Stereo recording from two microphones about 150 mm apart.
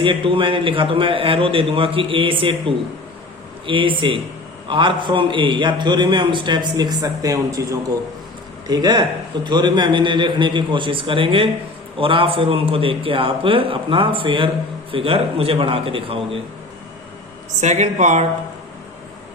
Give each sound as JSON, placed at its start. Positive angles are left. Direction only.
{"t": 0.0, "sound": "a man's voice", "side_deg": -35}
{"t": 17.6, "sound": "speech", "side_deg": -50}